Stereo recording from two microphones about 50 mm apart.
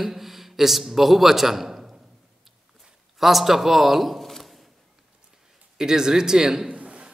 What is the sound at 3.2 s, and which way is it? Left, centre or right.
A man's voice, centre.